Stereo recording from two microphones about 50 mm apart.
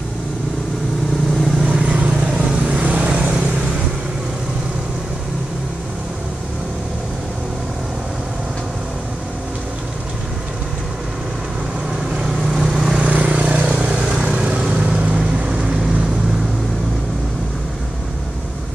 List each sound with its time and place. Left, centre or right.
1.3 s vehicle: centre
1.7 s vehicle: right
2.2 s vehicle: centre
2.7 s vehicle: right
12.1 s vehicle: centre
13.0 s vehicle: right